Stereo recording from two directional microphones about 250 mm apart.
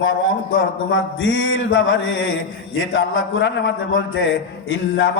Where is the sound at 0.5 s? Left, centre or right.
Left.